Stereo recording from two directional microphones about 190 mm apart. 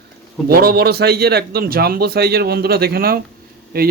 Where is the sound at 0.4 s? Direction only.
55° right (ahead or behind).